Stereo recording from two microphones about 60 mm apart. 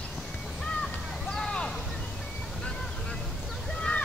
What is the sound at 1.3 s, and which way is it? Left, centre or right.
Vehicle, centre.